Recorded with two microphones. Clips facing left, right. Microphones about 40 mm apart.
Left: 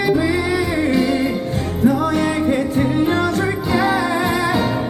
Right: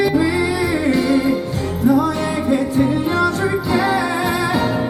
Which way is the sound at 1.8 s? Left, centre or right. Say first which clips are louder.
Right 1 dB; left.